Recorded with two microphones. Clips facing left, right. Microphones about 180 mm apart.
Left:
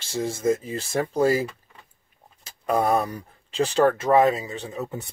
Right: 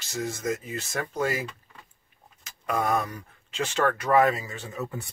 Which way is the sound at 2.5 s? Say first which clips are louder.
Left 5 dB; 35° left (ahead or behind).